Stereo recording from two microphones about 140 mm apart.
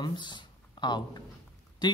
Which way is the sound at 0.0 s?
35° left (ahead or behind).